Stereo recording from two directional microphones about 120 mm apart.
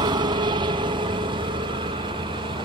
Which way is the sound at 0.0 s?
40° right (ahead or behind).